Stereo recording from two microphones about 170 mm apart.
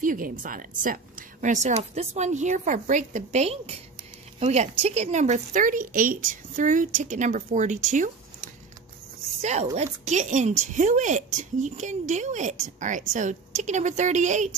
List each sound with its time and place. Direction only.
0.0 s a woman's voice: 55° right (ahead or behind)